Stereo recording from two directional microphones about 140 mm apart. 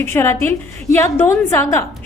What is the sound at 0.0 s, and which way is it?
A woman's voice, 15° left (ahead or behind).